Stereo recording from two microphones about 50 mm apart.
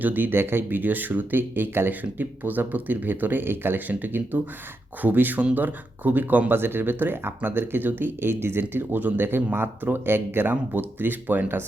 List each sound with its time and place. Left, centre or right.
0.0 s speech: right
1.9 s speech: right